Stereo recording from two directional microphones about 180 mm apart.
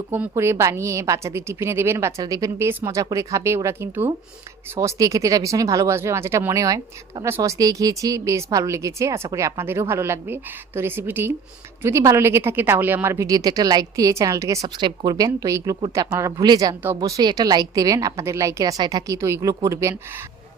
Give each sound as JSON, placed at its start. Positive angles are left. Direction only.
{"t": 0.1, "sound": "a woman's voice", "side_deg": -15}